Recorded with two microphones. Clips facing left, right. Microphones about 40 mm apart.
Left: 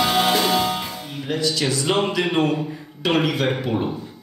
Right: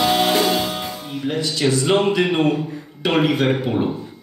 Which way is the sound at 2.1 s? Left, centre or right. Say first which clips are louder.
Right 3 dB; right.